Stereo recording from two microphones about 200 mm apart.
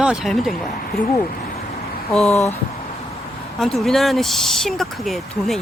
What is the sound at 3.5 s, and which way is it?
Speech, centre (ahead or behind).